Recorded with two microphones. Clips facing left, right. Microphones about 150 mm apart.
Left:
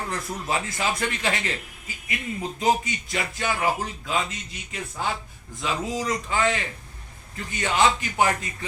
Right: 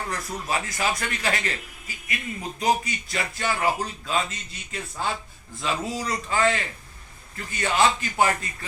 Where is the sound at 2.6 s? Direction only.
20° left (ahead or behind).